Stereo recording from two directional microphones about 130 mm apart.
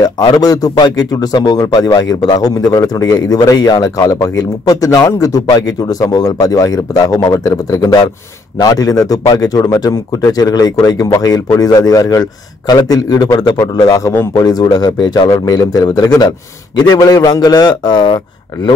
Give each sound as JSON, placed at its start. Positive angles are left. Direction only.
{"t": 0.0, "sound": "a man's voice", "side_deg": 30}
{"t": 14.4, "sound": "speech", "side_deg": 30}